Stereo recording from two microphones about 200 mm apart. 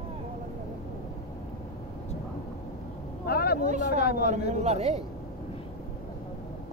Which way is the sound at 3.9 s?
50° left (ahead or behind).